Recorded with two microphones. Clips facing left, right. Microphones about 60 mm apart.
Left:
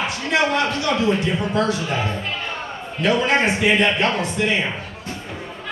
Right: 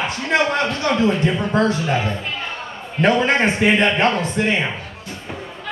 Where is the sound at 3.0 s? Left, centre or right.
Right.